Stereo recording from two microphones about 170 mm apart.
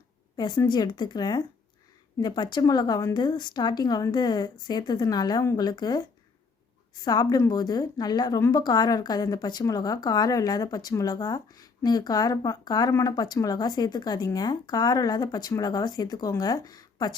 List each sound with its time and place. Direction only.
0.3 s a woman's voice: 25° left (ahead or behind)